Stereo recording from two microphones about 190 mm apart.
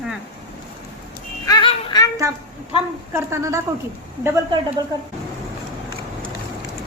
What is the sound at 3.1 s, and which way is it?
Speech, 15° right (ahead or behind).